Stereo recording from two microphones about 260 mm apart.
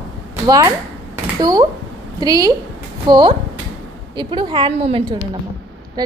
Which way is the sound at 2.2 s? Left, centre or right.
Centre.